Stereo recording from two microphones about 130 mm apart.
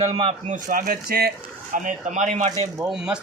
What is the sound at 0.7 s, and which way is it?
Speech, 90° right.